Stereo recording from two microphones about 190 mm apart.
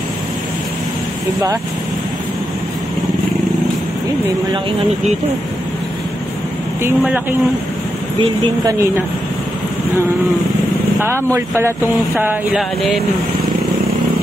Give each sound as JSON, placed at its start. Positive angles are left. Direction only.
{"t": 6.8, "sound": "speech", "side_deg": -10}
{"t": 11.0, "sound": "speech", "side_deg": -15}